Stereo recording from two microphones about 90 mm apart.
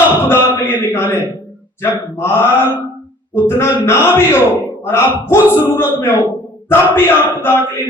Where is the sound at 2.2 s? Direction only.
30° left (ahead or behind).